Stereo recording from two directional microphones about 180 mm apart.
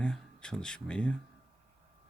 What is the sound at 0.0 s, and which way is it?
Speech, 5° left (ahead or behind).